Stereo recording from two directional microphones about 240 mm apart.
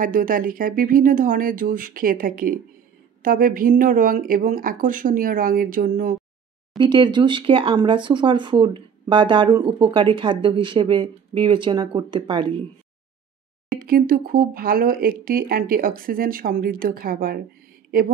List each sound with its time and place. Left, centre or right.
0.0 s speech: right
6.8 s speech: centre
13.7 s speech: right